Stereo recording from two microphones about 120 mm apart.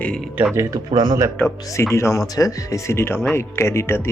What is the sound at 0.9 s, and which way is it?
Speech, 40° right (ahead or behind).